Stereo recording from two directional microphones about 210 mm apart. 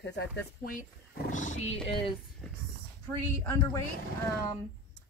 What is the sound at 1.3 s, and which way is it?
Speech, 35° left (ahead or behind).